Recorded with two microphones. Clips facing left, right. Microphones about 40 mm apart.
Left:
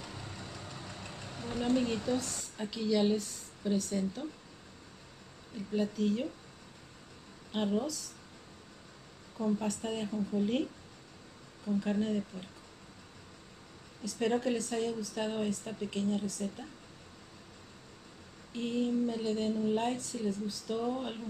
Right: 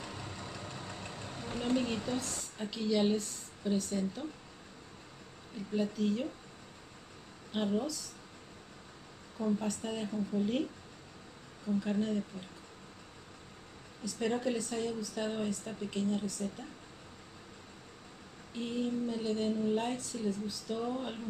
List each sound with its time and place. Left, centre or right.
0.0 s vehicle: centre
1.3 s a sound: centre
1.7 s speech: centre
5.8 s speech: centre
7.5 s speech: centre
9.4 s speech: centre
11.6 s speech: centre
14.0 s speech: centre
18.6 s speech: centre